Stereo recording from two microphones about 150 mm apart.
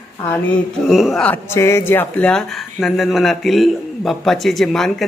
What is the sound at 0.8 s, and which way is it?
Speech, centre (ahead or behind).